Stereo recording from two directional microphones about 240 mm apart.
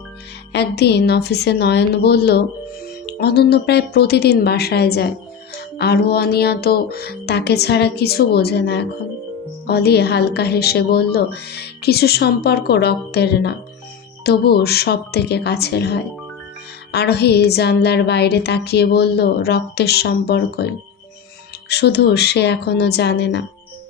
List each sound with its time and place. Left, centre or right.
0.5 s a woman's voice: left
21.7 s a woman's voice: left